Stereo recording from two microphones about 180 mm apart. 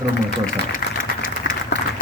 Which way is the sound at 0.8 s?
55° left (ahead or behind).